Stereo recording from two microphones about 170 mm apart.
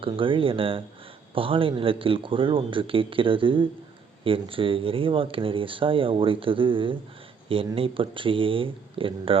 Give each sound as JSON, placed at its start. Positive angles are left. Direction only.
{"t": 0.0, "sound": "speech", "side_deg": -30}